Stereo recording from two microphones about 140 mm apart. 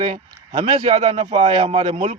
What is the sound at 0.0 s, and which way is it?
Speech, 45° right (ahead or behind).